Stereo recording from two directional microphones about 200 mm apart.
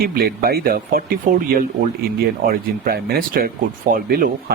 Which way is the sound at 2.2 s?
50° right (ahead or behind).